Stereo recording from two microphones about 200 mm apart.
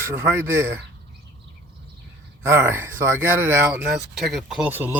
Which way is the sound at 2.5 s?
10° right (ahead or behind).